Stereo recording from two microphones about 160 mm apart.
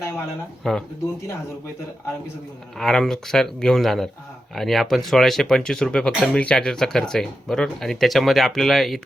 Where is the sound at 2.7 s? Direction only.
5° left (ahead or behind).